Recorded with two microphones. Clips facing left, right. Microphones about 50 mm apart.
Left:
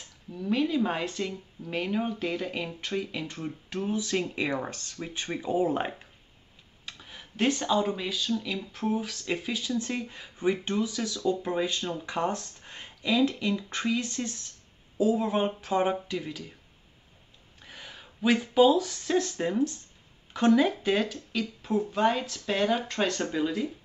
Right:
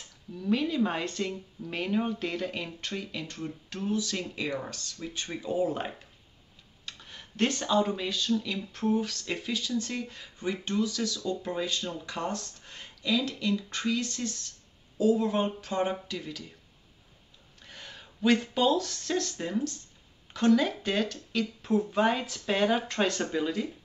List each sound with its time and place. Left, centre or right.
0.3 s speech: centre; by 6.0 s left
6.9 s speech: centre
17.6 s speech: centre